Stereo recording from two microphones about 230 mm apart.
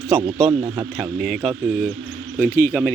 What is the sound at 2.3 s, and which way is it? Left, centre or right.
Speech, centre.